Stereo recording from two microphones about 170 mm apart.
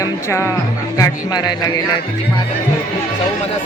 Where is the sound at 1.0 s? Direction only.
25° left (ahead or behind).